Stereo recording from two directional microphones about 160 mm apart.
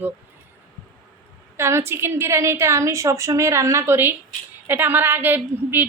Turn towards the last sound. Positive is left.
turn(degrees=-10)  # may be behind; listen again after turning